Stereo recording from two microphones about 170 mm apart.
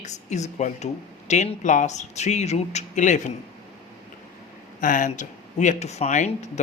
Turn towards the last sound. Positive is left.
turn(degrees=45)  # may be behind; listen again after turning